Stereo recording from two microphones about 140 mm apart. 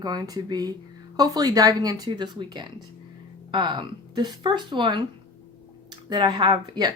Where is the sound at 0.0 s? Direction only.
30° right (ahead or behind).